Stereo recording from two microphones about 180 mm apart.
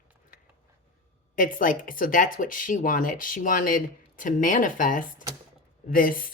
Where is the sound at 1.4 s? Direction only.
50° left (ahead or behind).